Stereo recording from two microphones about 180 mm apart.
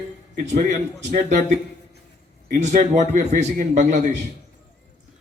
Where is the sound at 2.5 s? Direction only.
40° right (ahead or behind).